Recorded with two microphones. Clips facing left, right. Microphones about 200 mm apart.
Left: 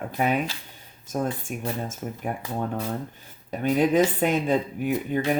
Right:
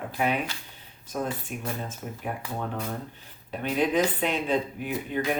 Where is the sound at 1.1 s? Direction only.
45° left (ahead or behind).